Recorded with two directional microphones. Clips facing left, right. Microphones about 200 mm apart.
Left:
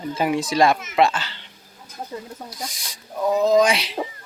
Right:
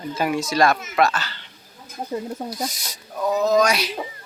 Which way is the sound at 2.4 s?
45° right (ahead or behind).